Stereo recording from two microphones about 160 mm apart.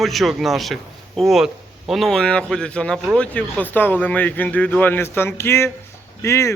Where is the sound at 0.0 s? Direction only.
Centre (ahead or behind).